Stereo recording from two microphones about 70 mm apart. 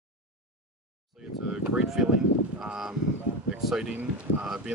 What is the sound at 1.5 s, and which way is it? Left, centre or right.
Speech, centre.